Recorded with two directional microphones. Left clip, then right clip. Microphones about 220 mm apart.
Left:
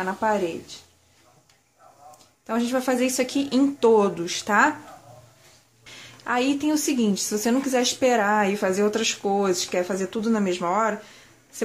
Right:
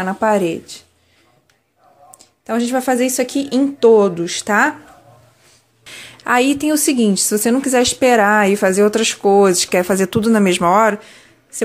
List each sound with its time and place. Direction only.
0.0 s speech: 30° right (ahead or behind)
2.4 s speech: 20° right (ahead or behind)
5.9 s a woman's voice: 25° right (ahead or behind)